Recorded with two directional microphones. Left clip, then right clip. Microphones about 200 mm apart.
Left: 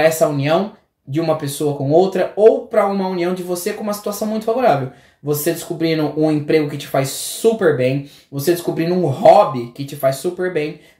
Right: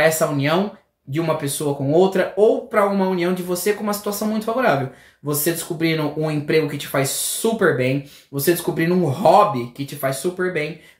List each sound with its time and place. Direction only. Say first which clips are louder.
0.0 s speech: left 3 dB; 10° right (ahead or behind)